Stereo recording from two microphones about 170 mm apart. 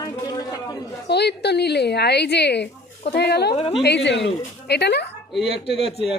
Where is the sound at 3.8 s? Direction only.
85° left.